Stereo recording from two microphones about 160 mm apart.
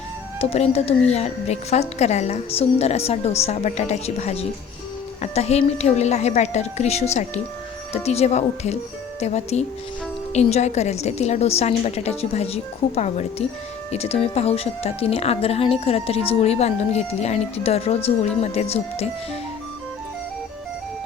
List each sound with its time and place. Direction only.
0.3 s a woman's voice: 40° left (ahead or behind)